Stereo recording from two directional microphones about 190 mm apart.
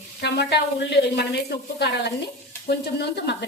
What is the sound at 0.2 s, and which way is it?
Speech, 60° left (ahead or behind).